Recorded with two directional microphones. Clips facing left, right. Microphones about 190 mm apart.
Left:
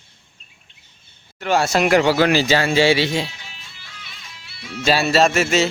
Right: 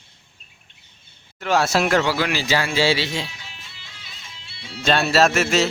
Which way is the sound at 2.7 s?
15° left (ahead or behind).